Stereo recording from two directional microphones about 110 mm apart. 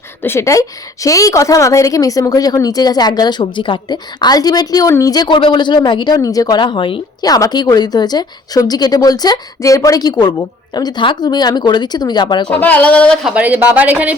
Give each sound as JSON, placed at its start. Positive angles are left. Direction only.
{"t": 0.2, "sound": "a woman's voice", "side_deg": 25}
{"t": 7.3, "sound": "a woman's voice", "side_deg": 35}
{"t": 12.5, "sound": "speech", "side_deg": 15}
{"t": 13.2, "sound": "speech", "side_deg": -15}